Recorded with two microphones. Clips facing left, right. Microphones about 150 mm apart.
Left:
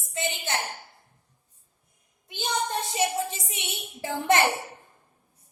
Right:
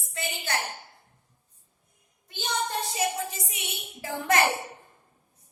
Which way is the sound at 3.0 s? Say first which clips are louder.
Left 4 dB; 25° left (ahead or behind).